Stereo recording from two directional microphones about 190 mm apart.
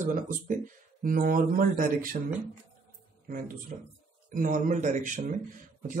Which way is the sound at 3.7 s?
40° right (ahead or behind).